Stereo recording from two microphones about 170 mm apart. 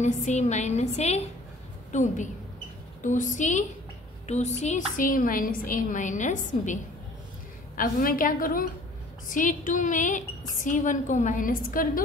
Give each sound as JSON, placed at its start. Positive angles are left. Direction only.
{"t": 0.0, "sound": "a woman's voice", "side_deg": 45}